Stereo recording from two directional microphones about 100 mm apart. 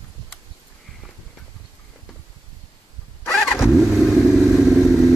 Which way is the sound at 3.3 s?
Centre (ahead or behind).